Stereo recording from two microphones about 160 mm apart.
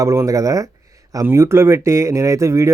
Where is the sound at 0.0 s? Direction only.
20° right (ahead or behind).